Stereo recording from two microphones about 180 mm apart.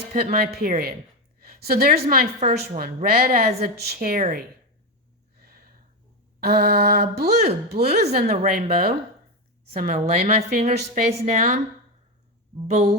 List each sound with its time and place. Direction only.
0.2 s a woman's voice: 55° right (ahead or behind)
5.4 s a sound: 55° right (ahead or behind)
6.4 s a woman's voice: 60° right (ahead or behind)
10.2 s speech: 40° right (ahead or behind)
12.6 s speech: 35° right (ahead or behind)